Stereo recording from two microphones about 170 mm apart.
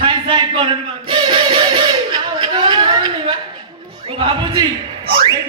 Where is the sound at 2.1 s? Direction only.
25° right (ahead or behind).